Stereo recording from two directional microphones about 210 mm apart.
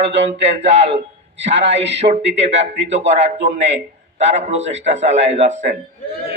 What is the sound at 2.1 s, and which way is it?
A man's voice, 30° right (ahead or behind).